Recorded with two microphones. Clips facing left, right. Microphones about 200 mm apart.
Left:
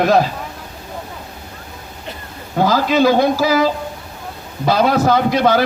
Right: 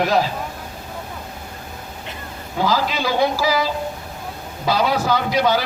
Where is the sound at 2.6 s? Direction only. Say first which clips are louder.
Left 7 dB; 50° left (ahead or behind).